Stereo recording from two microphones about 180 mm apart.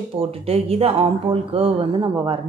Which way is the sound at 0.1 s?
30° right (ahead or behind).